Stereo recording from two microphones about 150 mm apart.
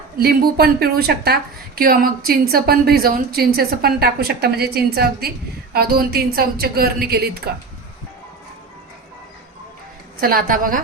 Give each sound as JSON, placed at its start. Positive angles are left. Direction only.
{"t": 0.2, "sound": "a woman's voice", "side_deg": -90}
{"t": 10.2, "sound": "a woman's voice", "side_deg": -75}